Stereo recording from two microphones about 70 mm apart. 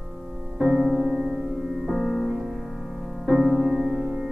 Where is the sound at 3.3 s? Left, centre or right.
Centre.